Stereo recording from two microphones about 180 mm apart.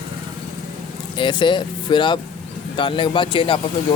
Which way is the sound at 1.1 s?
25° left (ahead or behind).